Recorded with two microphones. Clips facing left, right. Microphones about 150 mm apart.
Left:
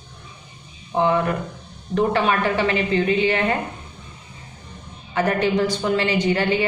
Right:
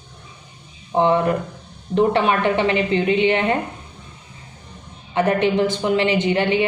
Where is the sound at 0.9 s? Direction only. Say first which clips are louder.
Right 3 dB; 30° right (ahead or behind).